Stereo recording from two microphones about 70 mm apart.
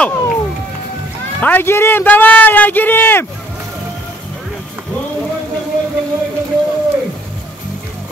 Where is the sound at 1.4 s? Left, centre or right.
Left.